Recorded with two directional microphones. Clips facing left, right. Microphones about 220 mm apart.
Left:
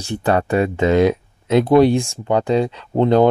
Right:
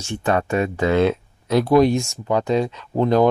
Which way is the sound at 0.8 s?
15° left (ahead or behind).